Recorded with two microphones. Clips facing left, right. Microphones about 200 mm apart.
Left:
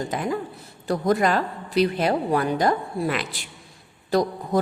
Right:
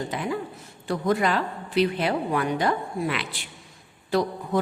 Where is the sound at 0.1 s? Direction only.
45° left (ahead or behind).